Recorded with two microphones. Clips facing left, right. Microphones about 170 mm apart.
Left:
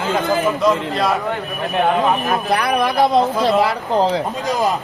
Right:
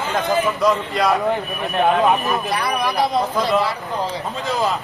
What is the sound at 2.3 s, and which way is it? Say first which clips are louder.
Speech: left 3 dB; 55° left (ahead or behind).